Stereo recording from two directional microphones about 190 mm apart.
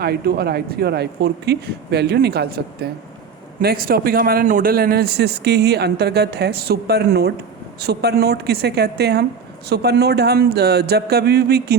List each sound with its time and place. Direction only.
0.0 s a man's voice: 55° right (ahead or behind)